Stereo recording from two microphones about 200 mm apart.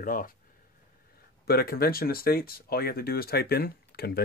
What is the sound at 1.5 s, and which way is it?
Speech, 50° left (ahead or behind).